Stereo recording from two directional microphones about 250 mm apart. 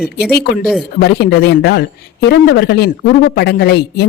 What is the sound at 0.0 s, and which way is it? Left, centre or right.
Speech, left.